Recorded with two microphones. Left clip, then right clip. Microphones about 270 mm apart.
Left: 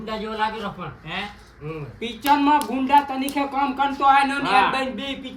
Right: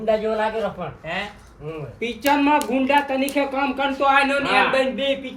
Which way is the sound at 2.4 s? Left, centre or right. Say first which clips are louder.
Right 1 dB; centre.